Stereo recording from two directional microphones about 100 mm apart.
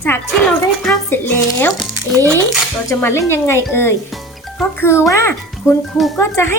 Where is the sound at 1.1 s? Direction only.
20° left (ahead or behind).